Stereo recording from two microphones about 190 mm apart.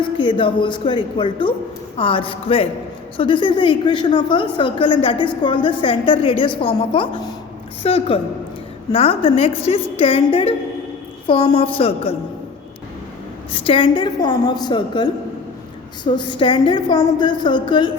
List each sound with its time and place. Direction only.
0.0 s a woman's voice: 25° left (ahead or behind)
13.5 s a woman's voice: 25° left (ahead or behind)